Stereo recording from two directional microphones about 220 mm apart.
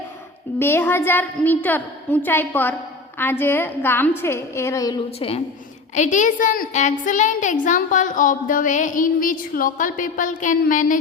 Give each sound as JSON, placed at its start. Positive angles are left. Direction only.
{"t": 0.6, "sound": "a woman's voice", "side_deg": 10}
{"t": 5.9, "sound": "a woman's voice", "side_deg": 35}